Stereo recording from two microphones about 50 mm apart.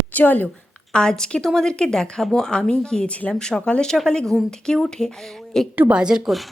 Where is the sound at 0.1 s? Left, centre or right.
Left.